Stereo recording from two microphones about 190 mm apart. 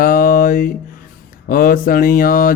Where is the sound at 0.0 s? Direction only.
45° left (ahead or behind).